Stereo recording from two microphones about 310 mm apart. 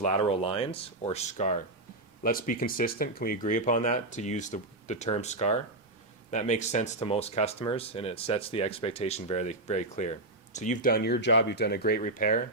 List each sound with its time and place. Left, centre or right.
0.0 s speech: centre